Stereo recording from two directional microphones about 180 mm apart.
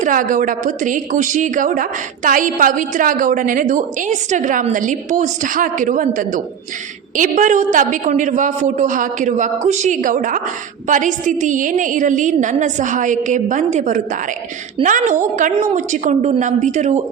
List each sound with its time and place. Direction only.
0.0 s a woman's voice: 45° right (ahead or behind)